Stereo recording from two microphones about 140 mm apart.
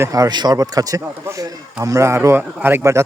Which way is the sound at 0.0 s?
25° right (ahead or behind).